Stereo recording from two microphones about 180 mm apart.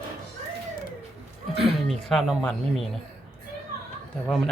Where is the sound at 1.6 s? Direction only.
Centre (ahead or behind).